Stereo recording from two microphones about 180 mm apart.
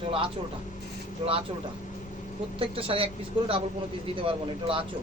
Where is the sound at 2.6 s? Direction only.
30° right (ahead or behind).